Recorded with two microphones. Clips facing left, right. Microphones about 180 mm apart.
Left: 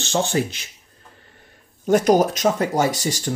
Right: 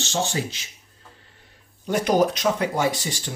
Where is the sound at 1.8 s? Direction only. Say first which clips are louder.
Left 4 dB; 45° left (ahead or behind).